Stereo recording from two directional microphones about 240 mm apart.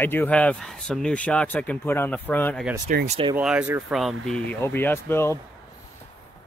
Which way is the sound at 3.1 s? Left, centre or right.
Right.